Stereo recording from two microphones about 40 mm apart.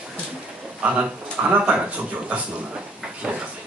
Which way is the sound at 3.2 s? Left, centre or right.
Centre.